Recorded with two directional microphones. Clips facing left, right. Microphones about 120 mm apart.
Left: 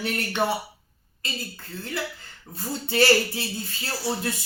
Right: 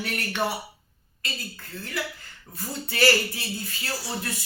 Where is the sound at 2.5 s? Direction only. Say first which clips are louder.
Left 4 dB; 30° left (ahead or behind).